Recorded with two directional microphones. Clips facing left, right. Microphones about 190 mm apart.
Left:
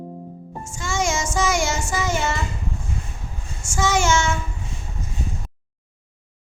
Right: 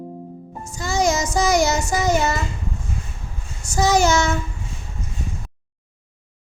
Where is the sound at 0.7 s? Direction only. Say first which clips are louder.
Right 4 dB; 35° right (ahead or behind).